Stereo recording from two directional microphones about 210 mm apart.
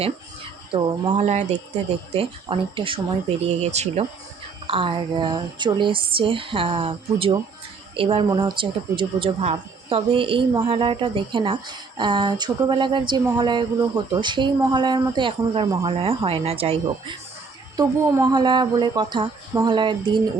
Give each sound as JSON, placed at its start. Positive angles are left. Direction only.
{"t": 0.7, "sound": "speech", "side_deg": -25}
{"t": 17.7, "sound": "speech", "side_deg": -20}